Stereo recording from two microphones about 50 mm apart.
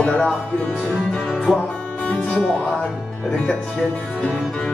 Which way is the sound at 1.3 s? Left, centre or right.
Centre.